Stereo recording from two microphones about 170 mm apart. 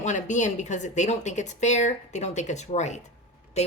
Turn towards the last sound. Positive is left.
turn(degrees=40)  # may be behind; listen again after turning